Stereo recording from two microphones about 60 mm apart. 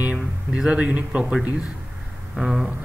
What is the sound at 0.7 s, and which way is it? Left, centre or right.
Speech, centre.